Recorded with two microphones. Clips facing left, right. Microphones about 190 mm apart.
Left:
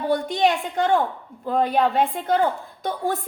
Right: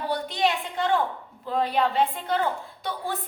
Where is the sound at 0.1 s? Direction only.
50° left (ahead or behind).